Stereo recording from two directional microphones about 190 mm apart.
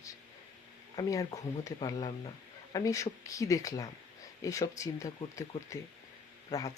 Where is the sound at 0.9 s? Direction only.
20° left (ahead or behind).